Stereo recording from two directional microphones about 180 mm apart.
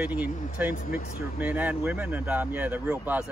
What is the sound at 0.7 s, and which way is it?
Speech, 50° left (ahead or behind).